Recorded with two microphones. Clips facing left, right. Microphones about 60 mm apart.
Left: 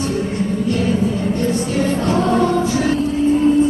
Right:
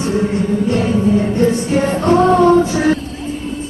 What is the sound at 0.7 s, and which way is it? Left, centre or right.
Music, right.